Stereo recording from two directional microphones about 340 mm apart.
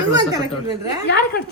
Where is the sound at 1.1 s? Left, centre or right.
Left.